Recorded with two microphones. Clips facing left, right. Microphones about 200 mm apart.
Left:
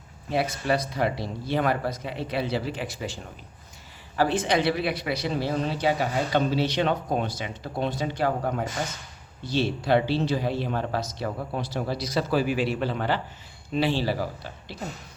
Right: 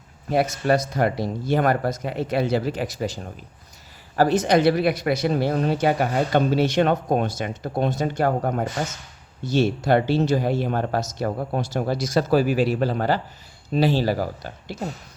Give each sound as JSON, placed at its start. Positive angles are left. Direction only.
{"t": 0.3, "sound": "speech", "side_deg": -50}